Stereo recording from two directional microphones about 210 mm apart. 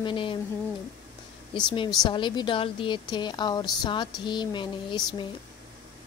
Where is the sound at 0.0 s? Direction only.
25° left (ahead or behind).